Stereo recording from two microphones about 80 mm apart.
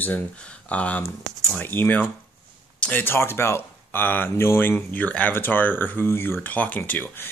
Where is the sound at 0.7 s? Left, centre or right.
Centre.